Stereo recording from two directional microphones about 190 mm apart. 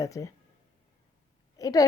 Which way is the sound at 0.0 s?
15° left (ahead or behind).